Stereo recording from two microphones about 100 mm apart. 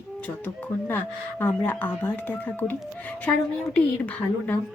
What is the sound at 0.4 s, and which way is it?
A woman's voice, 20° left (ahead or behind).